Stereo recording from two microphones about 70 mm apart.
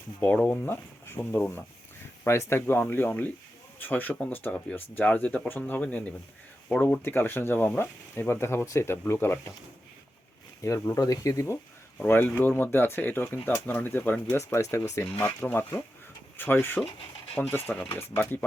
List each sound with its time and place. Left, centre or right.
0.3 s speech: centre
0.6 s speech: left
2.2 s speech: left; by 6.1 s centre
7.0 s speech: left
10.6 s speech: left
11.9 s speech: left
14.3 s speech: left
15.2 s speech: left